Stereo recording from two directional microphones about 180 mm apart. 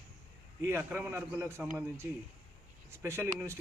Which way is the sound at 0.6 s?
15° right (ahead or behind).